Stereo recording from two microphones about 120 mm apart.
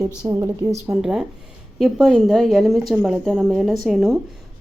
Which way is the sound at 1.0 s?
5° right (ahead or behind).